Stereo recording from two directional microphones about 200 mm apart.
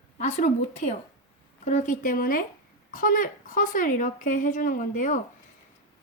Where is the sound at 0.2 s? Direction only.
35° left (ahead or behind).